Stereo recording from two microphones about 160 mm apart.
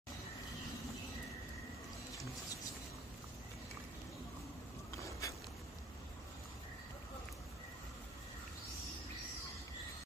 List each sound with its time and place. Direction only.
4.9 s vehicle: 20° left (ahead or behind)